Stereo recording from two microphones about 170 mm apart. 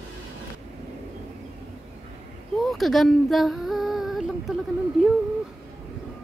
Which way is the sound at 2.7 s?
Centre (ahead or behind).